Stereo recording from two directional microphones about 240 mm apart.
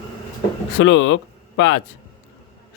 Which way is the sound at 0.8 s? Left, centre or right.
Left.